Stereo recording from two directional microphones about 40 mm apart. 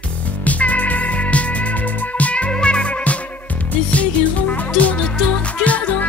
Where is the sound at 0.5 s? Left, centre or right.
Left.